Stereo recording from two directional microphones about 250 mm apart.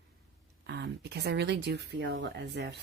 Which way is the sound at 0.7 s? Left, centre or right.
Right.